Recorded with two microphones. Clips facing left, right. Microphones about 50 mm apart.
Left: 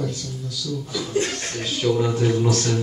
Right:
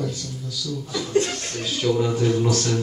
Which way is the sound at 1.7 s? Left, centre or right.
Centre.